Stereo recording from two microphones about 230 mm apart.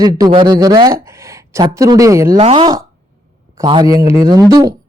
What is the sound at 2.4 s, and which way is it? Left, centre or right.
Speech, right.